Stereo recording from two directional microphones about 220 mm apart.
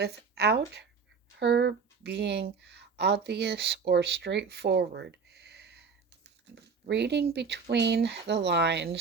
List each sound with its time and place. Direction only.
0.0 s speech: 50° right (ahead or behind)